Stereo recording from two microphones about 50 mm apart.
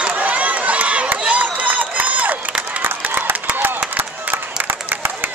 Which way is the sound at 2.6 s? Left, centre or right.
Right.